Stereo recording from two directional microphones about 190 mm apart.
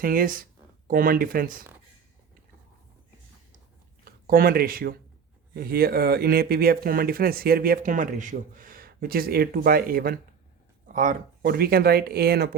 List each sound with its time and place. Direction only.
0.0 s speech: 50° right (ahead or behind)
4.0 s speech: 50° right (ahead or behind)